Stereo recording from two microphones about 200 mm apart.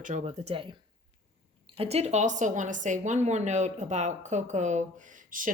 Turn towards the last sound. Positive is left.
turn(degrees=-40)  # may be behind; listen again after turning